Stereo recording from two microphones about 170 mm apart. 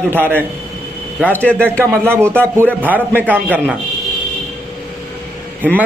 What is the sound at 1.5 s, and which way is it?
A man's voice, 15° right (ahead or behind).